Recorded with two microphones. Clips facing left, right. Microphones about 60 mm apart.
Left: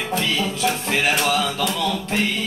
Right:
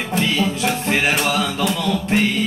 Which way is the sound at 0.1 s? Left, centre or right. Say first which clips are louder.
Right 4 dB; right.